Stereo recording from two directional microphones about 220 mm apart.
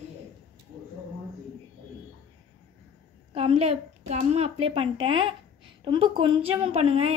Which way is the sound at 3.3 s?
25° right (ahead or behind).